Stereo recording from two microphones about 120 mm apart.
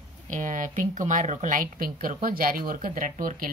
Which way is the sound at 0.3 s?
90° right.